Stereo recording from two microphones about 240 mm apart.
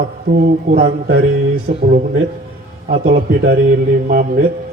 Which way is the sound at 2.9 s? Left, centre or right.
Right.